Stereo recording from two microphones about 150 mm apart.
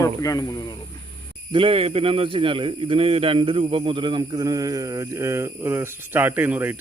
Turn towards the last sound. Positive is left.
turn(degrees=-10)  # may be behind; listen again after turning